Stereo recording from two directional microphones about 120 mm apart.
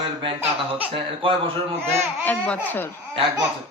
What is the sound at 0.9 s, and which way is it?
Speech, 45° right (ahead or behind).